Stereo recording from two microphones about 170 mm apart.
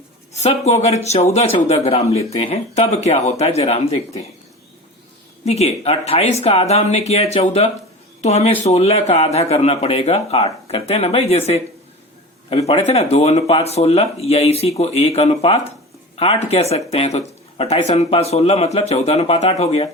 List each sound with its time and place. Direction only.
0.3 s speech: 40° left (ahead or behind)
5.5 s speech: 40° left (ahead or behind)